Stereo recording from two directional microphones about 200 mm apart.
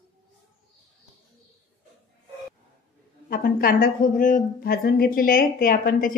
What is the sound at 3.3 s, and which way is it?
Speech, 45° left (ahead or behind).